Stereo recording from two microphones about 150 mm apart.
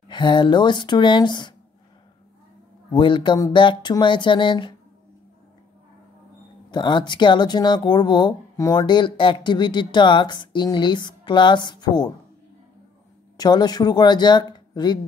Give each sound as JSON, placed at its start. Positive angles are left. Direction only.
{"t": 0.1, "sound": "speech", "side_deg": 30}
{"t": 2.9, "sound": "speech", "side_deg": 35}
{"t": 6.7, "sound": "speech", "side_deg": 30}
{"t": 13.4, "sound": "speech", "side_deg": 25}